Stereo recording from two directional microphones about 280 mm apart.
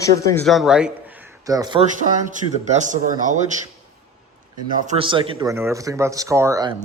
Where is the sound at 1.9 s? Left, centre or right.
Right.